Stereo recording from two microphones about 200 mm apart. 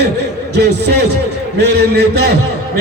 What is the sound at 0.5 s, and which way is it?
A man's voice, 55° right (ahead or behind).